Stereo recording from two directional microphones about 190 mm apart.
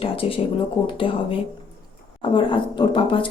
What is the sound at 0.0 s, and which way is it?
Speech, 30° left (ahead or behind).